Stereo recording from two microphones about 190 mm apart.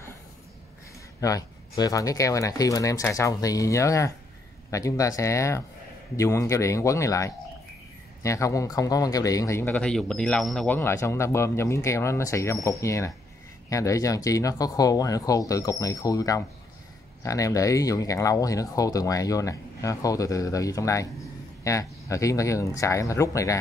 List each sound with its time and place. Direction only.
1.2 s speech: 20° left (ahead or behind); by 10.8 s 5° left (ahead or behind)
10.8 s speech: 15° left (ahead or behind)